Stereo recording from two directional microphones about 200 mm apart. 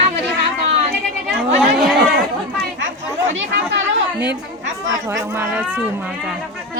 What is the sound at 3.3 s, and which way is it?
Speech, 65° right (ahead or behind).